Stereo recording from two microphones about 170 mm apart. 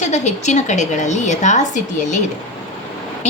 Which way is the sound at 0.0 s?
40° left (ahead or behind).